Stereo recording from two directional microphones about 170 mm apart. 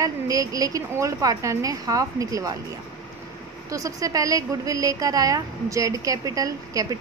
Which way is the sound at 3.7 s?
20° right (ahead or behind).